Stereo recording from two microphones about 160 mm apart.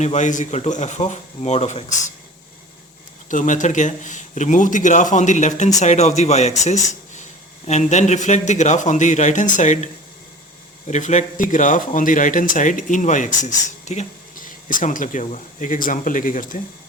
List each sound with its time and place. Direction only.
0.0 s speech: 45° left (ahead or behind)
3.2 s speech: 50° left (ahead or behind)